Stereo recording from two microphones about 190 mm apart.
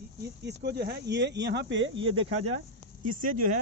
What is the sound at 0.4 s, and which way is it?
Speech, 60° right (ahead or behind).